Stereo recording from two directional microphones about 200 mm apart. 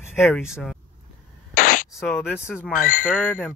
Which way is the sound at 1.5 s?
40° left (ahead or behind).